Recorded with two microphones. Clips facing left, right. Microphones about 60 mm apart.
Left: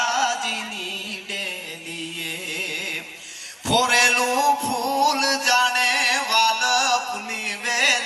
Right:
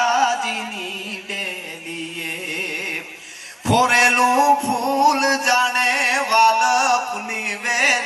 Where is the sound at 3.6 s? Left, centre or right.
Right.